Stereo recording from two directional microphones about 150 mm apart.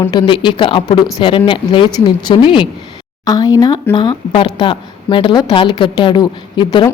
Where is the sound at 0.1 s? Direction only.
30° left (ahead or behind).